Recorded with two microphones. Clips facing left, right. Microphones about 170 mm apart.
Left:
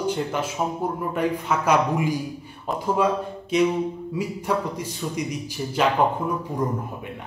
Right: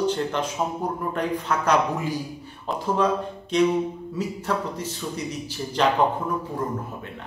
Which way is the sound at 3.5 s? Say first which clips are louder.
Even; 10° left (ahead or behind).